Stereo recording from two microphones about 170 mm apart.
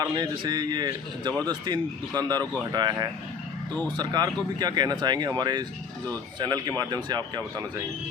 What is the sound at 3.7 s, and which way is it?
Speech, 10° left (ahead or behind).